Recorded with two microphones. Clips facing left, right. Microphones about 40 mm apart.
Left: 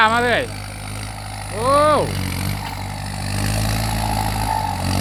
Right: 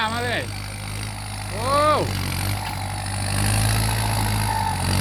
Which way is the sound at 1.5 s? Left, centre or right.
Centre.